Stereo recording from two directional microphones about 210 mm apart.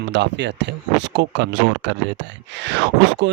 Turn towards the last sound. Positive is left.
turn(degrees=-55)  # may be behind; listen again after turning